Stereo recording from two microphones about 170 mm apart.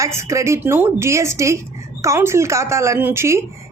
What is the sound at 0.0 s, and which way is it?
A woman's voice, 15° right (ahead or behind).